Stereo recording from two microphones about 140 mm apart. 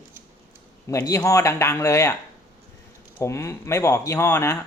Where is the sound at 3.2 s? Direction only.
20° left (ahead or behind).